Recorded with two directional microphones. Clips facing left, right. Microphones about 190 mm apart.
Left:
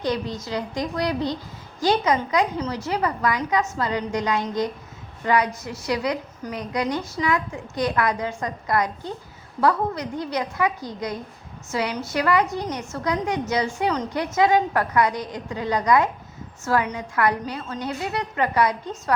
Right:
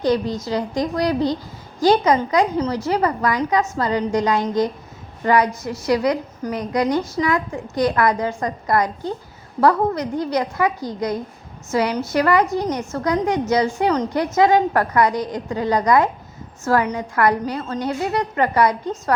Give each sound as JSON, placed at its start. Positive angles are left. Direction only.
{"t": 0.0, "sound": "a woman's voice", "side_deg": -40}